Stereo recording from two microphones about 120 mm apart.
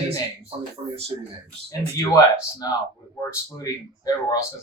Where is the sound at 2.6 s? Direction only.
30° left (ahead or behind).